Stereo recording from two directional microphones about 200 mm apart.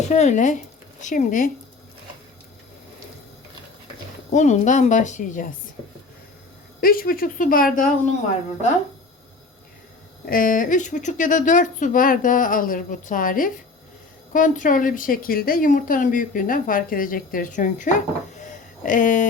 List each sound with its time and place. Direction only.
0.1 s a woman's voice: 35° left (ahead or behind)
4.3 s a woman's voice: 35° left (ahead or behind)
6.8 s speech: 45° left (ahead or behind)
10.2 s a woman's voice: 45° left (ahead or behind)